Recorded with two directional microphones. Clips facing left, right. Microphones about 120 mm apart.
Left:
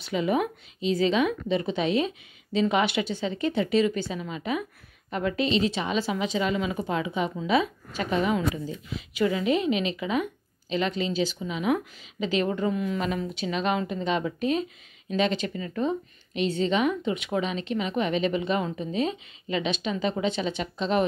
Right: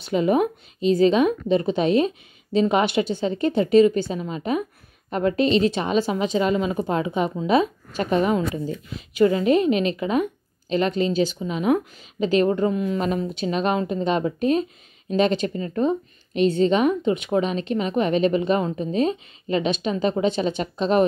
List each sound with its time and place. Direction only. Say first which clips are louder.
0.0 s a woman's voice: right 6 dB; 45° right (ahead or behind)